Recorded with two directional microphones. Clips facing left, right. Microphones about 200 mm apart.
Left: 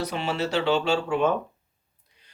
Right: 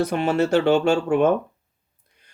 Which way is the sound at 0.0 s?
50° right (ahead or behind).